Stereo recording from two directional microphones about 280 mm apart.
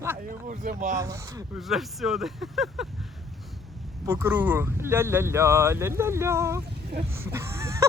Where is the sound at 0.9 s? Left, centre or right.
Centre.